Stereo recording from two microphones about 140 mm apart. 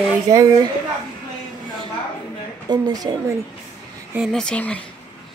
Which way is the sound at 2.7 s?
30° right (ahead or behind).